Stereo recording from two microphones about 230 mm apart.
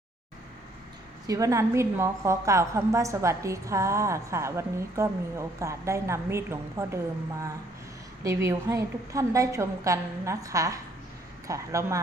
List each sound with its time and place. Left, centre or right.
1.3 s a woman's voice: centre
8.2 s a woman's voice: centre